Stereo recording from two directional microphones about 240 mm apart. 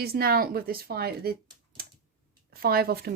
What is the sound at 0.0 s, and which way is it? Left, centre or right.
Speech, right.